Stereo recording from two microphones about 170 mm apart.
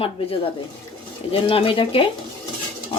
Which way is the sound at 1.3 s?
30° left (ahead or behind).